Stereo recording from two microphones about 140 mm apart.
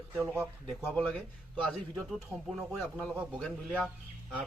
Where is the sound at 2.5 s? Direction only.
Centre (ahead or behind).